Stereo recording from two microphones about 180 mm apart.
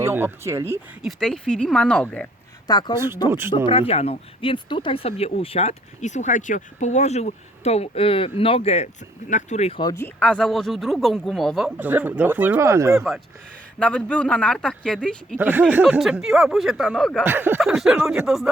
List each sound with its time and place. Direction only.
0.0 s speech: 15° right (ahead or behind)
1.0 s speech: 5° left (ahead or behind)
2.6 s speech: 25° left (ahead or behind)
10.2 s speech: 5° left (ahead or behind); by 13.1 s 15° right (ahead or behind)
13.7 s speech: 5° left (ahead or behind)
15.4 s speech: 10° right (ahead or behind)
17.2 s speech: 10° right (ahead or behind)